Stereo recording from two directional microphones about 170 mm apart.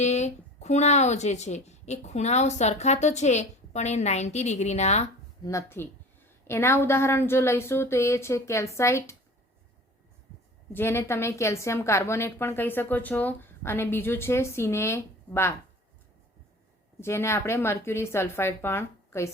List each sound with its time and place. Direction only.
0.0 s speech: 40° left (ahead or behind)
5.4 s a woman's voice: 20° left (ahead or behind)
10.7 s a woman's voice: 15° left (ahead or behind)
17.0 s a woman's voice: 15° left (ahead or behind)